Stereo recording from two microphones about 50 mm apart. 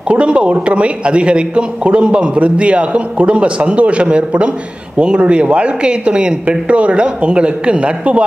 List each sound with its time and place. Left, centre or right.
0.1 s a man's voice: right